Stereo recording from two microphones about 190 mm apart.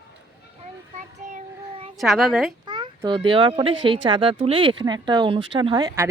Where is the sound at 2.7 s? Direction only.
25° right (ahead or behind).